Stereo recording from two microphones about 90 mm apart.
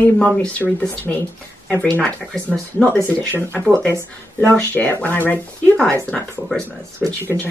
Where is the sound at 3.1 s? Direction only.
15° left (ahead or behind).